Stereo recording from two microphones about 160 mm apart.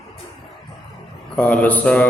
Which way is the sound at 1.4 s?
10° left (ahead or behind).